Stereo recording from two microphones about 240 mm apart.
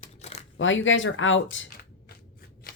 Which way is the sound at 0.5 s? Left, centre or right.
Left.